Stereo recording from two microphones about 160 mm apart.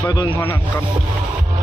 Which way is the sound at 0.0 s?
20° left (ahead or behind).